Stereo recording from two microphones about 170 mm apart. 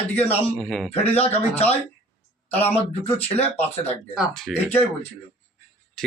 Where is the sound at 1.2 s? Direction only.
35° left (ahead or behind).